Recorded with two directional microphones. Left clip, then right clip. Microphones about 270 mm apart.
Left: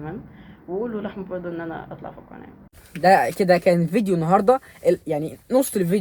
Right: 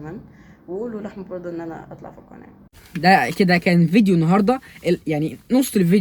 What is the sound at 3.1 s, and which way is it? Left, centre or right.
Speech, left.